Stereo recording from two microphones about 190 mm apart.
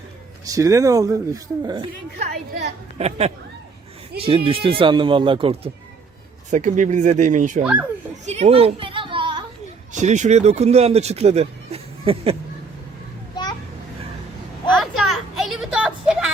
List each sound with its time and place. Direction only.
0.4 s speech: 15° right (ahead or behind)
3.0 s speech: 35° right (ahead or behind)
6.5 s speech: 40° right (ahead or behind)
7.6 s speech: 10° right (ahead or behind)
8.3 s children playing: 35° right (ahead or behind)
9.9 s speech: 40° right (ahead or behind)
13.3 s children playing: 20° left (ahead or behind)
14.8 s a sound: centre (ahead or behind)